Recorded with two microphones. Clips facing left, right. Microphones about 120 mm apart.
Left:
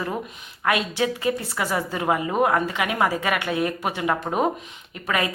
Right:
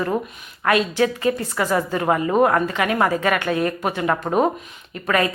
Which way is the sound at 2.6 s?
15° left (ahead or behind).